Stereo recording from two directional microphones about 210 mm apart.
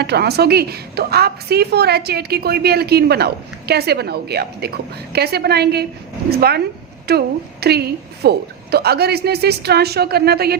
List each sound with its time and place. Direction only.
0.0 s a woman's voice: 50° right (ahead or behind)
7.1 s a woman's voice: 50° right (ahead or behind)